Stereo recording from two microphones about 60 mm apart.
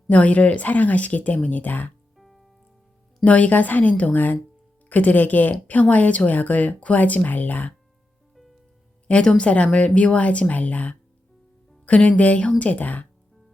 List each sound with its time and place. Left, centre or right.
0.1 s a woman's voice: left
2.1 s music: centre
3.2 s a woman's voice: left
9.0 s a woman's voice: centre